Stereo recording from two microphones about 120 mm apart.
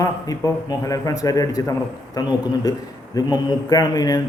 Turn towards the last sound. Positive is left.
turn(degrees=30)  # may be behind; listen again after turning